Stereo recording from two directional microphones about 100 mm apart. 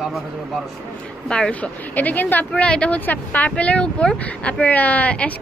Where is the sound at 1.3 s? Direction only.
10° left (ahead or behind).